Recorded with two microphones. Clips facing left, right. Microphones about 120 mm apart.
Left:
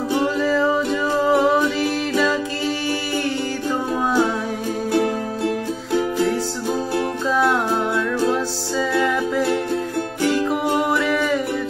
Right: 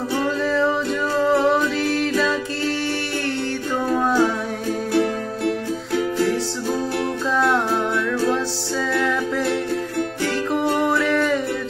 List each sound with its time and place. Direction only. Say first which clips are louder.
0.4 s music: left 2 dB; 5° left (ahead or behind)
3.9 s music: right 2 dB; 10° left (ahead or behind)
4.9 s music: left 1 dB; 25° left (ahead or behind)
10.6 s music: even; 15° left (ahead or behind)
11.0 s music: right 1 dB; 5° left (ahead or behind)